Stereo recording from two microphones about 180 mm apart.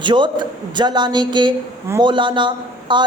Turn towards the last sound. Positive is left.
turn(degrees=-25)  # may be behind; listen again after turning